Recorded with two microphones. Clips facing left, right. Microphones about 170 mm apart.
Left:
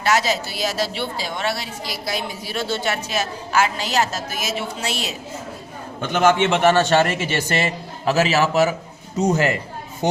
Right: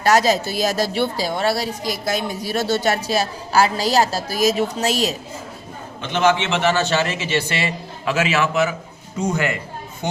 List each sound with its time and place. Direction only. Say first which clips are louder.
0.0 s a woman's voice: right 4 dB; 40° right (ahead or behind)
6.0 s a man's voice: left 1 dB; 50° left (ahead or behind)